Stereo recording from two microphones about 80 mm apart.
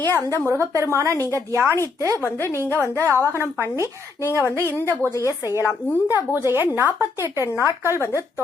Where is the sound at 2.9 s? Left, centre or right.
Right.